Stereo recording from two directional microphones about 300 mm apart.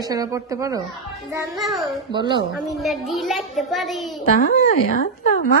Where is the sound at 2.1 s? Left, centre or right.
Centre.